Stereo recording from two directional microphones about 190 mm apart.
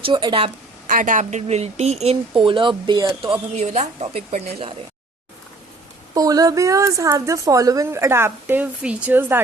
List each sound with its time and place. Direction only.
0.0 s a woman's voice: 25° right (ahead or behind)
0.9 s speech: 45° right (ahead or behind); by 3.3 s 20° right (ahead or behind)
3.5 s speech: 35° right (ahead or behind)
6.1 s a woman's voice: 20° right (ahead or behind)